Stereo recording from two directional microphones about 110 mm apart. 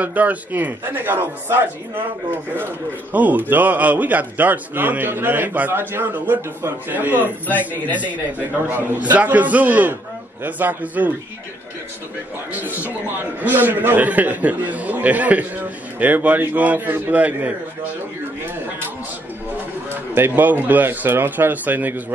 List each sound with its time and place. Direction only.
0.0 s a man's voice: 15° right (ahead or behind)
12.5 s a man's voice: 15° right (ahead or behind)
20.2 s a man's voice: 20° right (ahead or behind)